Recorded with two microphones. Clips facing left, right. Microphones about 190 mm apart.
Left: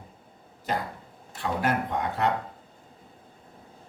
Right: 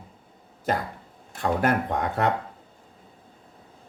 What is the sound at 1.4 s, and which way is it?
Speech, 50° right (ahead or behind).